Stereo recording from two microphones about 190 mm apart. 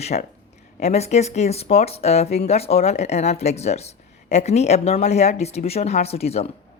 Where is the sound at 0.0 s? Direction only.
35° left (ahead or behind).